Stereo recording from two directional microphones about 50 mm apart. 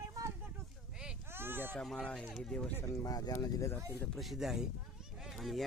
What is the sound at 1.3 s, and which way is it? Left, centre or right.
Speech, right.